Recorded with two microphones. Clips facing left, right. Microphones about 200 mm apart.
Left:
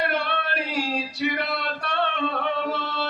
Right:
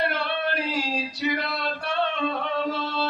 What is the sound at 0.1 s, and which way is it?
Male singing, 60° left (ahead or behind).